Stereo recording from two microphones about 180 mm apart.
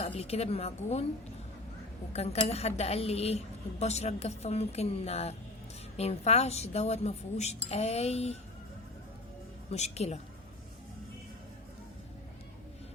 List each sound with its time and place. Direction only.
0.1 s speech: 35° left (ahead or behind)
2.1 s speech: 35° left (ahead or behind)
9.6 s speech: 35° left (ahead or behind)